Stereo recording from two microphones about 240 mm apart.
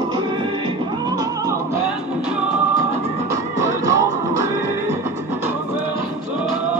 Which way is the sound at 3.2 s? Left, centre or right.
Centre.